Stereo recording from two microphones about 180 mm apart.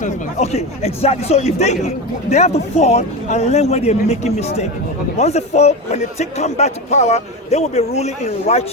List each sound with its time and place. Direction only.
0.0 s a man's voice: 40° left (ahead or behind)